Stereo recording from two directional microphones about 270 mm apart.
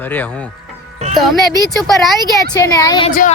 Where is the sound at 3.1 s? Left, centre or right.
Left.